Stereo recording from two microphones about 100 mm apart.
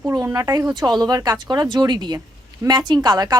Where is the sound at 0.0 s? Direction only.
20° right (ahead or behind).